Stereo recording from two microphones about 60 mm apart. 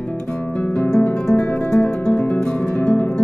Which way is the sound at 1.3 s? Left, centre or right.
Left.